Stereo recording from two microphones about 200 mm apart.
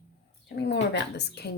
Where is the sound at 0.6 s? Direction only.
60° left (ahead or behind).